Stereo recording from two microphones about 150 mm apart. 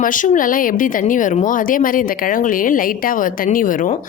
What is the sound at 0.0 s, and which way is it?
Speech, 60° left (ahead or behind).